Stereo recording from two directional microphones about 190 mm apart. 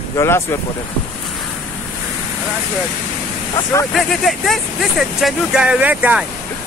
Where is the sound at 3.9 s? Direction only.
Centre (ahead or behind).